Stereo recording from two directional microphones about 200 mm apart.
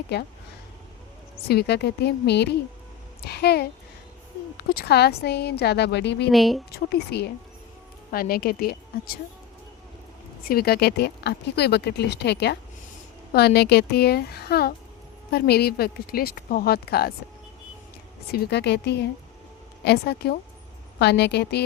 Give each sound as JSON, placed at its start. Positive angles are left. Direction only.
{"t": 0.1, "sound": "speech", "side_deg": 55}
{"t": 1.5, "sound": "speech", "side_deg": 55}
{"t": 6.3, "sound": "a woman's voice", "side_deg": 0}
{"t": 6.7, "sound": "speech", "side_deg": 50}
{"t": 10.5, "sound": "speech", "side_deg": 50}
{"t": 18.3, "sound": "speech", "side_deg": 55}